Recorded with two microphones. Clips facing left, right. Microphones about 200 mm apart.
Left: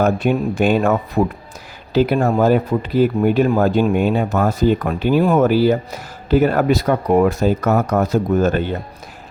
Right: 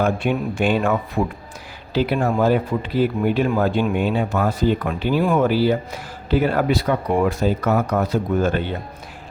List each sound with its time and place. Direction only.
0.0 s a man's voice: 40° left (ahead or behind)